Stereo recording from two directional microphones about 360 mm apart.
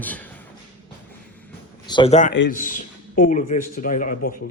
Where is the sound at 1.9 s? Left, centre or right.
Centre.